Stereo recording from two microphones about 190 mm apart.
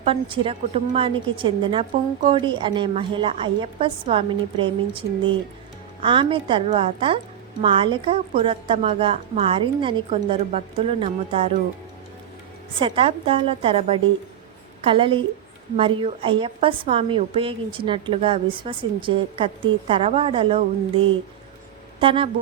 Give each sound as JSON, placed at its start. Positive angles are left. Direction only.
{"t": 0.0, "sound": "a woman's voice", "side_deg": -30}
{"t": 12.8, "sound": "a woman's voice", "side_deg": -30}